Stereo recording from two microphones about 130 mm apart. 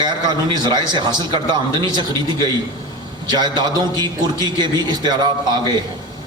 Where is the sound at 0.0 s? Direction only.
35° right (ahead or behind).